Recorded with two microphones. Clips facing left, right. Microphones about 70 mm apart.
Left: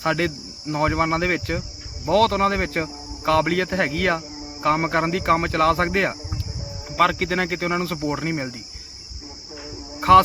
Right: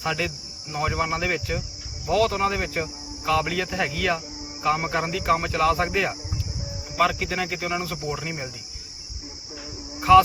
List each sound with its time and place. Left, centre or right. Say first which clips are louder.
0.0 s a man's voice: left 5 dB; left
2.0 s a man's voice: left 4 dB; left
10.0 s speech: left 1 dB; left